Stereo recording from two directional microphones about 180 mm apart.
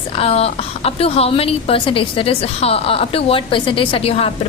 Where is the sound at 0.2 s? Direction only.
35° left (ahead or behind).